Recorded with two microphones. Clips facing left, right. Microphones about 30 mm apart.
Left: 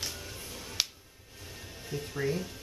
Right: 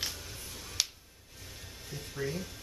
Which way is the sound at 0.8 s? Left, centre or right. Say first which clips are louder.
Left 1 dB; centre.